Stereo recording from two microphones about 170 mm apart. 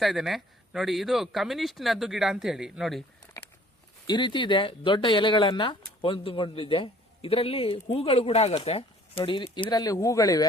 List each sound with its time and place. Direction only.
0.0 s speech: centre (ahead or behind)
4.0 s speech: 25° left (ahead or behind)